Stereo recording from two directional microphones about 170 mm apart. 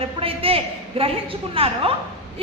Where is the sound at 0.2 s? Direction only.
35° right (ahead or behind).